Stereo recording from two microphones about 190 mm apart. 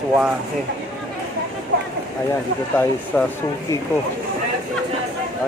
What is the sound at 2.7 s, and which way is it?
Speech, 10° left (ahead or behind).